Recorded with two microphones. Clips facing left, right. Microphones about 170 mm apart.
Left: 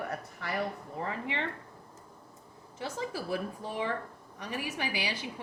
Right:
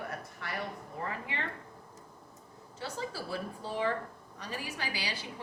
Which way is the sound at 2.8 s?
15° left (ahead or behind).